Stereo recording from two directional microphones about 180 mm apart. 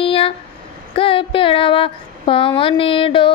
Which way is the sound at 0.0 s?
30° left (ahead or behind).